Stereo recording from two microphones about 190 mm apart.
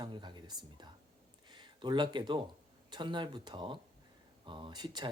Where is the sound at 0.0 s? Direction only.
25° right (ahead or behind).